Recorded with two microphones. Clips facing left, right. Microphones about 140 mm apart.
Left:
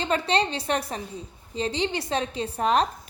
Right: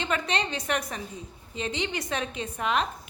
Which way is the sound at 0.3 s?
30° left (ahead or behind).